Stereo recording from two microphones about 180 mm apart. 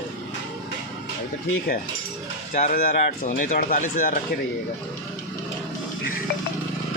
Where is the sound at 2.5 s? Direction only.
45° left (ahead or behind).